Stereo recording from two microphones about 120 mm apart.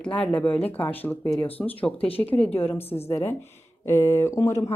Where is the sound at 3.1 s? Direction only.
20° left (ahead or behind).